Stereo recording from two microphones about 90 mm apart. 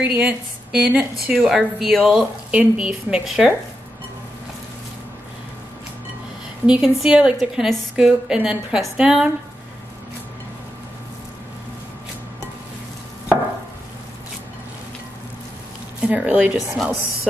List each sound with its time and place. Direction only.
0.0 s a woman's voice: 15° right (ahead or behind)
1.5 s speech: centre (ahead or behind)
2.0 s a woman's voice: 10° right (ahead or behind)
6.6 s a woman's voice: 10° right (ahead or behind)
16.0 s a woman's voice: 15° right (ahead or behind)
16.7 s speech: centre (ahead or behind)